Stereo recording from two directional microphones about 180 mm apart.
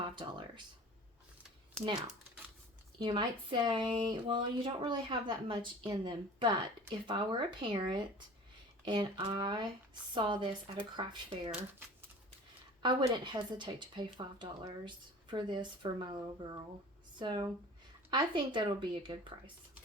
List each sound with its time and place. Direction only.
0.0 s a sound: 25° right (ahead or behind)
3.0 s speech: 25° right (ahead or behind)
12.8 s speech: 25° right (ahead or behind)